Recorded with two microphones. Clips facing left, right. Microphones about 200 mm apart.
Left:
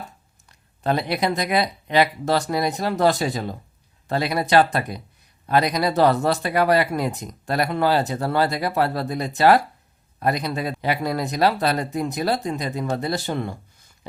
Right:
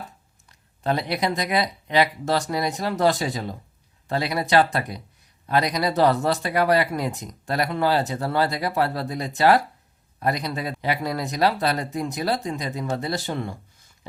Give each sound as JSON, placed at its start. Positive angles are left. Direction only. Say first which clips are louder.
{"t": 0.9, "sound": "speech", "louder": "left 2 dB", "side_deg": 50}